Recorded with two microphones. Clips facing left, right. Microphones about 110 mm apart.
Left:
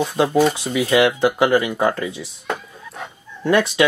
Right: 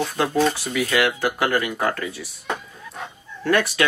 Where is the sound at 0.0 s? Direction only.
15° left (ahead or behind).